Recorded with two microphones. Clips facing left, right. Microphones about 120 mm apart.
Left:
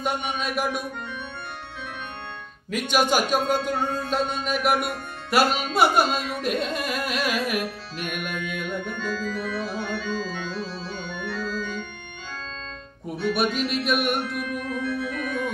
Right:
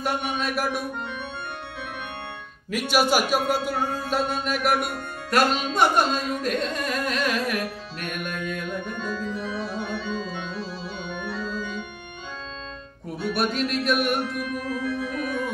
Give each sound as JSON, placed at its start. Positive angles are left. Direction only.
{"t": 0.0, "sound": "music", "side_deg": 0}
{"t": 2.7, "sound": "a man's voice", "side_deg": -5}
{"t": 5.3, "sound": "carnatic music", "side_deg": 5}
{"t": 8.9, "sound": "organ", "side_deg": 0}
{"t": 9.3, "sound": "organ", "side_deg": -20}
{"t": 9.9, "sound": "organ", "side_deg": 0}
{"t": 13.2, "sound": "music", "side_deg": 0}